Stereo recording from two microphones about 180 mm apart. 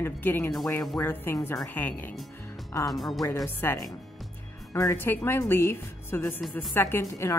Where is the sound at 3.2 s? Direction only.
15° left (ahead or behind).